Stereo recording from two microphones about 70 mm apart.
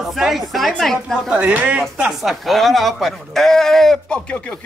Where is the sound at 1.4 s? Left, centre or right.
Right.